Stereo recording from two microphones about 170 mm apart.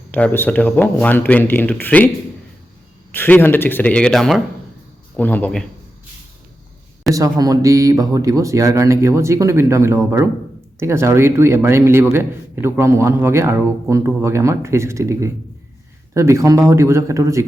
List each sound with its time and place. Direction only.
0.1 s speech: 10° left (ahead or behind)
3.1 s speech: 10° left (ahead or behind)
7.1 s speech: 20° right (ahead or behind)